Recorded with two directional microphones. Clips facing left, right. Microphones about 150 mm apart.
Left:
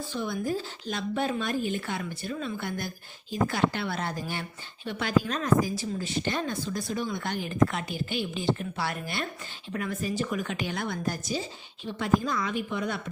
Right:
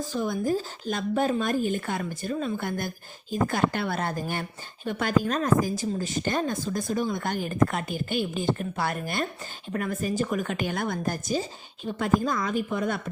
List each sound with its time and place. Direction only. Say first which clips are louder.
0.0 s speech: right 4 dB; 40° right (ahead or behind)